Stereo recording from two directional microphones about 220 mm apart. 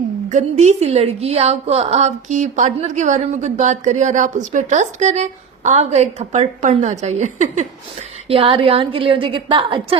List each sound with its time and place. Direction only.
0.3 s a woman's voice: 30° right (ahead or behind)